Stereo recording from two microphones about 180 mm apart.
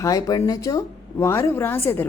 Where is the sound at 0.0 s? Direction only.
20° left (ahead or behind).